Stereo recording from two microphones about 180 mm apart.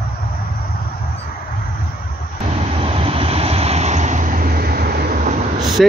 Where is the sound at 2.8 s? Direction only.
30° right (ahead or behind); by 5.2 s 55° right (ahead or behind).